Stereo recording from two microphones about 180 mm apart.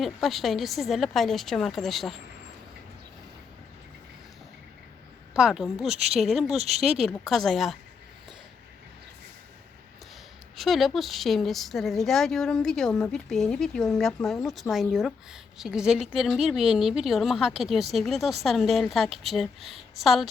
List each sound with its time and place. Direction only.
0.0 s a woman's voice: centre (ahead or behind)
5.3 s a woman's voice: 5° right (ahead or behind)
6.6 s speech: 35° right (ahead or behind)
7.0 s a woman's voice: centre (ahead or behind)
10.6 s a woman's voice: centre (ahead or behind)